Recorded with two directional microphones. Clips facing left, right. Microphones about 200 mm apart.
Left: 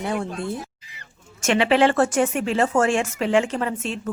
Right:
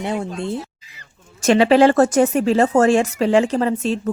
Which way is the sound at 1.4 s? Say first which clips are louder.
Right 5 dB; 35° right (ahead or behind).